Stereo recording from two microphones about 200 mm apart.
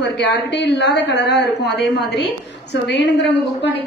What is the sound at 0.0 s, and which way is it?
A woman's voice, 60° left (ahead or behind).